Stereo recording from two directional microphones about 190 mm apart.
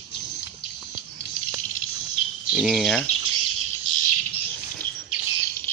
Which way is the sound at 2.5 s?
5° right (ahead or behind).